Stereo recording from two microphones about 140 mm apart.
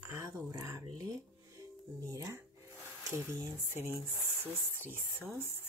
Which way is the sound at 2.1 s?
25° right (ahead or behind).